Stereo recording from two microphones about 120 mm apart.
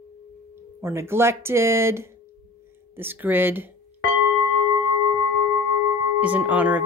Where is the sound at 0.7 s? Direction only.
20° right (ahead or behind).